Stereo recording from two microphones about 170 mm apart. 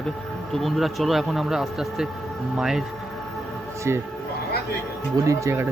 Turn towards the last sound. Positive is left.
turn(degrees=-15)  # may be behind; listen again after turning